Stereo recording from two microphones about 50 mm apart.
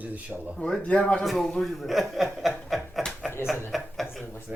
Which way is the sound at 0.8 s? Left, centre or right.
Left.